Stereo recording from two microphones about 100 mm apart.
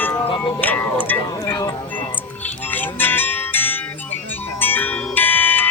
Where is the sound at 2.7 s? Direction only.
20° left (ahead or behind).